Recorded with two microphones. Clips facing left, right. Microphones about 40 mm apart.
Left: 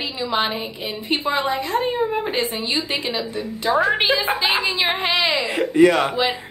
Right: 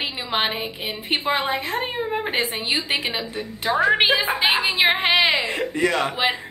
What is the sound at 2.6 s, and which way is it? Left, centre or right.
Speech, right.